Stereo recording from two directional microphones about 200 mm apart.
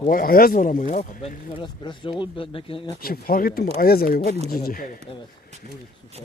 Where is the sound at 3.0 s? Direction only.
45° left (ahead or behind).